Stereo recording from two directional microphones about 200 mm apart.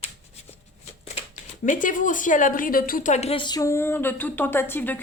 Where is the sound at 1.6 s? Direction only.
40° left (ahead or behind).